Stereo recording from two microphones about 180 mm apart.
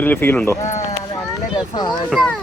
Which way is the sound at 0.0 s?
10° left (ahead or behind).